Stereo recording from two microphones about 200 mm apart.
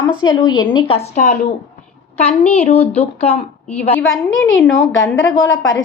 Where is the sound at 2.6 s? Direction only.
30° left (ahead or behind).